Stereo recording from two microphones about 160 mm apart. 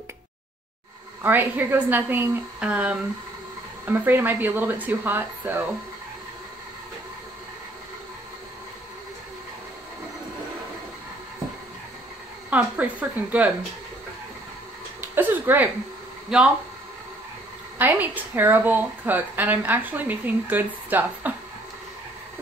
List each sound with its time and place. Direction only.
1.2 s a woman's voice: 10° right (ahead or behind)
12.4 s a woman's voice: 10° right (ahead or behind)
15.0 s speech: 10° right (ahead or behind)
17.7 s a woman's voice: 10° right (ahead or behind)